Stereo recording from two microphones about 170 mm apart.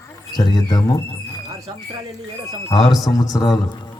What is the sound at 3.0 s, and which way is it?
Speech, 20° left (ahead or behind).